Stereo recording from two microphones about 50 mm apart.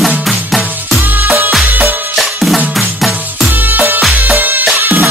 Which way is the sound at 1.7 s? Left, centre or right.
Right.